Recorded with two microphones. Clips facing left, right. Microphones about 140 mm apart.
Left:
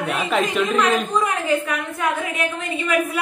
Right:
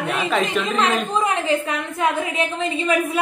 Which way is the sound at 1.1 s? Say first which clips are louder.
Even; 25° right (ahead or behind).